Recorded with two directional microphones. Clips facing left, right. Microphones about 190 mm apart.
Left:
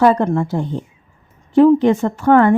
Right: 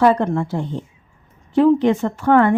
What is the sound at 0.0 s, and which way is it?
Speech, 45° left (ahead or behind).